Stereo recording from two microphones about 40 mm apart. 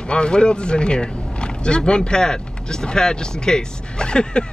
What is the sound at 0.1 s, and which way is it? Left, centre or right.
Speech, left.